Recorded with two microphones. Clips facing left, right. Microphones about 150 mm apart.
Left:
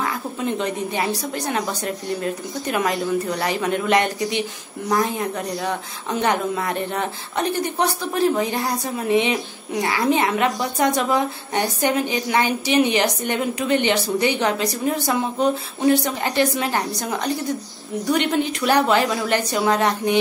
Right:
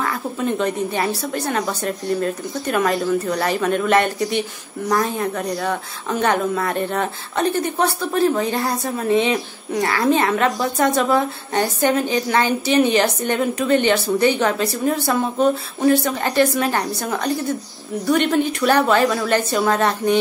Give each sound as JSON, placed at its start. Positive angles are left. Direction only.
{"t": 0.0, "sound": "speech", "side_deg": 15}